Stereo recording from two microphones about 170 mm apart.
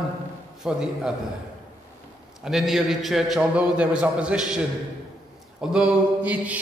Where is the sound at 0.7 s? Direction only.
5° right (ahead or behind).